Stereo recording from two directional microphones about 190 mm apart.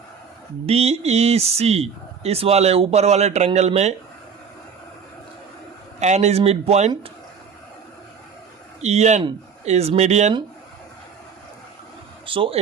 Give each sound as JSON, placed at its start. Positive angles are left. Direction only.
{"t": 0.6, "sound": "speech", "side_deg": -30}
{"t": 6.0, "sound": "speech", "side_deg": -35}
{"t": 8.8, "sound": "speech", "side_deg": -35}
{"t": 12.2, "sound": "speech", "side_deg": -25}